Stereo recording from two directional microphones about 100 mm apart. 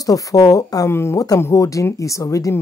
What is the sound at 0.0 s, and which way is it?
Speech, 35° left (ahead or behind).